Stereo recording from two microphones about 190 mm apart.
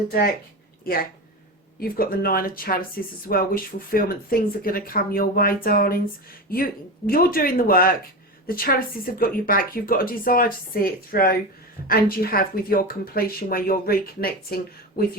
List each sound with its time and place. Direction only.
1.8 s speech: 50° left (ahead or behind)